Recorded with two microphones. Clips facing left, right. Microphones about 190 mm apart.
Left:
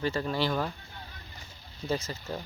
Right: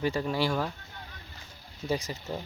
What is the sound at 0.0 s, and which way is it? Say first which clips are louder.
Speech: right 1 dB; 10° right (ahead or behind).